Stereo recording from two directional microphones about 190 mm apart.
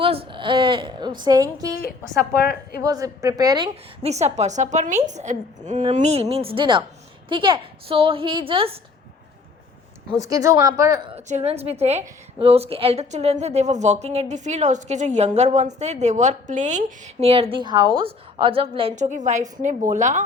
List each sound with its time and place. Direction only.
0.0 s a woman's voice: 30° right (ahead or behind)
2.3 s a woman's voice: 55° left (ahead or behind)
2.8 s a woman's voice: 20° right (ahead or behind)
4.0 s a woman's voice: 35° right (ahead or behind)
10.2 s a woman's voice: 20° right (ahead or behind)
11.1 s a woman's voice: 35° right (ahead or behind)